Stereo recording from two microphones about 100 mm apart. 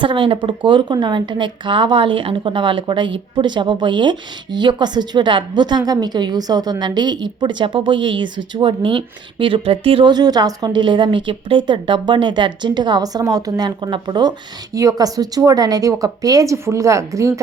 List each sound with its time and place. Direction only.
0.0 s a woman's voice: 55° right (ahead or behind)
10.1 s a woman's voice: 40° right (ahead or behind)